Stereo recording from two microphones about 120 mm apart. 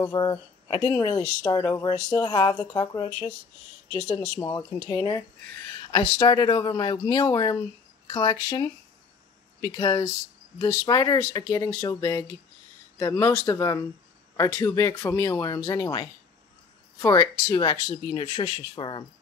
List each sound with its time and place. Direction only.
0.0 s speech: 35° left (ahead or behind)
3.9 s speech: 25° left (ahead or behind)
17.6 s speech: 35° left (ahead or behind)
18.8 s speech: 45° left (ahead or behind)